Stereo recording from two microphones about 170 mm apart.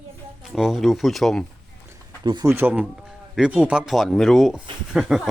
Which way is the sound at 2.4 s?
10° right (ahead or behind).